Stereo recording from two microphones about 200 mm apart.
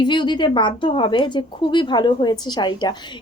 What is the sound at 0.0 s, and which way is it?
Speech, 25° left (ahead or behind).